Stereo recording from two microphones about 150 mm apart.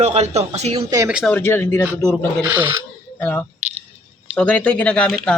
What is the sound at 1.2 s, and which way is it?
Speech, 10° left (ahead or behind).